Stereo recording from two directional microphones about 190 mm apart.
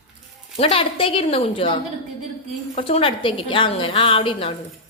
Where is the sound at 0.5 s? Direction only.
30° left (ahead or behind).